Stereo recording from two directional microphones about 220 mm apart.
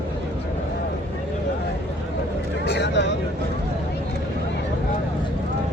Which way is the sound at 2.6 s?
50° left (ahead or behind).